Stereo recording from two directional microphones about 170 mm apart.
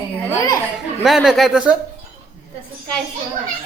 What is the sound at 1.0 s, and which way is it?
Speech, centre (ahead or behind).